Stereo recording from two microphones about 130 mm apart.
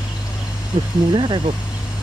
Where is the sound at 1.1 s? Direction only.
35° right (ahead or behind).